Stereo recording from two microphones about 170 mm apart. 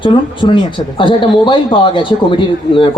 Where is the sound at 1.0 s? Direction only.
30° left (ahead or behind).